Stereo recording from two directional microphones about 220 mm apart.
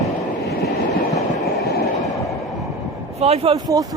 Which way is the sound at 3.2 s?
30° right (ahead or behind).